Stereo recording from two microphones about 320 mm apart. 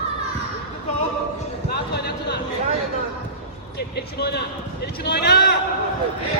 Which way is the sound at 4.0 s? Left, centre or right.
Left.